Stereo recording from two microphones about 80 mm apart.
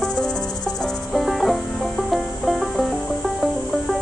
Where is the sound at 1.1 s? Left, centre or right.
Centre.